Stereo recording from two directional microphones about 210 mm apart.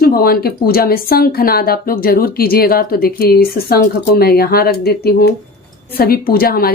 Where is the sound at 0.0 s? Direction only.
45° left (ahead or behind).